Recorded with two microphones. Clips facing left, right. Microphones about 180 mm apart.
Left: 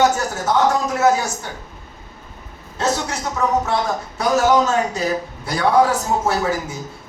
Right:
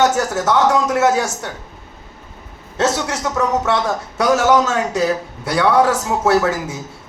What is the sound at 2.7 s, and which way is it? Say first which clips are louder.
Speech: right 3 dB; 75° right (ahead or behind).